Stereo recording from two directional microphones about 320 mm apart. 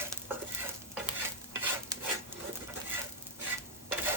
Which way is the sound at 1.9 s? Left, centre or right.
Centre.